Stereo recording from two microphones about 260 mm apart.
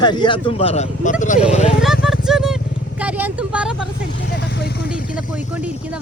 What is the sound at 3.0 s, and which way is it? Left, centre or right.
Vehicle, centre.